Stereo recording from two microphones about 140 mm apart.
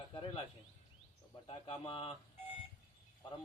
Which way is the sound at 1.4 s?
40° left (ahead or behind).